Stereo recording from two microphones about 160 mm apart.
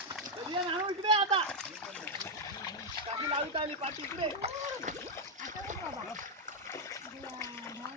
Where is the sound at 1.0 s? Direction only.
35° right (ahead or behind).